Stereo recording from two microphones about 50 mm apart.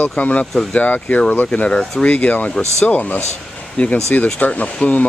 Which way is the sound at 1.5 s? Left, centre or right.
Left.